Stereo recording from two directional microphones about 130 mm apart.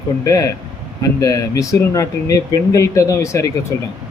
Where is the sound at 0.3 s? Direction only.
25° left (ahead or behind).